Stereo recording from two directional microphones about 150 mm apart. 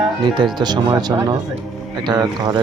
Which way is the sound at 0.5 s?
30° right (ahead or behind).